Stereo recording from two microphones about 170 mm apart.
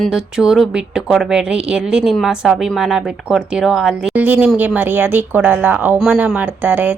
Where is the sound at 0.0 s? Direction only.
5° right (ahead or behind).